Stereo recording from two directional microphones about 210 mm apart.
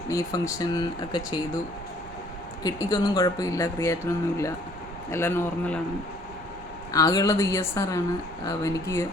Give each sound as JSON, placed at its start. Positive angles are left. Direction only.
{"t": 0.1, "sound": "speech", "side_deg": 15}
{"t": 2.6, "sound": "speech", "side_deg": 15}
{"t": 6.9, "sound": "speech", "side_deg": 15}